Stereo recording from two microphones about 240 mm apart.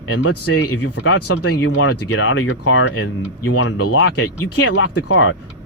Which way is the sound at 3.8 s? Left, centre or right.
Left.